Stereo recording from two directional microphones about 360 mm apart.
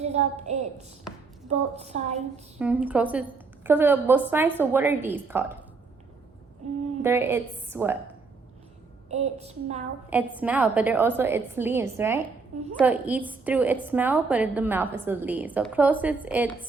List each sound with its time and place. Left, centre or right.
0.0 s a woman's voice: centre
2.6 s a woman's voice: centre
7.0 s a woman's voice: centre
9.0 s a woman's voice: centre
10.1 s a woman's voice: centre